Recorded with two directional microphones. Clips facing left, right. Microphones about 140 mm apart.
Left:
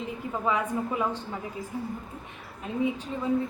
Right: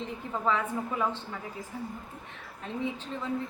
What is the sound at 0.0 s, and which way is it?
A woman's voice, 10° left (ahead or behind).